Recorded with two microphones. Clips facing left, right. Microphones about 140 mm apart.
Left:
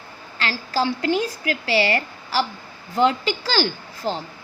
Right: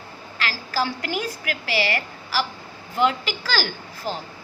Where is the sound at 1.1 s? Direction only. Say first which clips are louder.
Left 5 dB; 30° left (ahead or behind).